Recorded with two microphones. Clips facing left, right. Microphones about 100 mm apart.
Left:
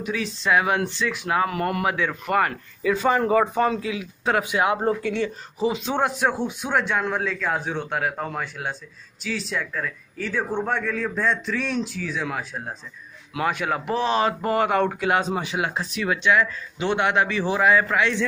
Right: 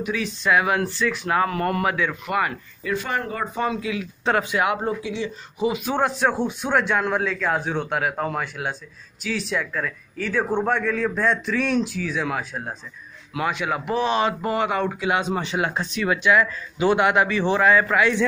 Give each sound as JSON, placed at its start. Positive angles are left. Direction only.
{"t": 0.0, "sound": "speech", "side_deg": 30}
{"t": 2.0, "sound": "speech", "side_deg": 35}
{"t": 3.5, "sound": "speech", "side_deg": 35}
{"t": 4.2, "sound": "speech", "side_deg": 5}
{"t": 4.5, "sound": "speech", "side_deg": 25}
{"t": 4.8, "sound": "speech", "side_deg": 55}
{"t": 5.6, "sound": "speech", "side_deg": 30}
{"t": 5.9, "sound": "a man's voice", "side_deg": 10}
{"t": 13.5, "sound": "speech", "side_deg": 45}
{"t": 13.9, "sound": "speech", "side_deg": 35}
{"t": 15.3, "sound": "a man's voice", "side_deg": 5}